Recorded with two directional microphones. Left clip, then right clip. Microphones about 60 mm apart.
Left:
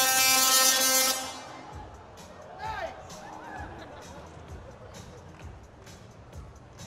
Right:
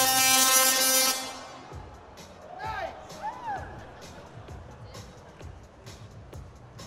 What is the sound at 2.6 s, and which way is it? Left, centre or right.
Music, centre.